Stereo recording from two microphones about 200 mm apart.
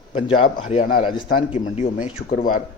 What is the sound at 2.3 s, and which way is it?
Speech, 45° left (ahead or behind).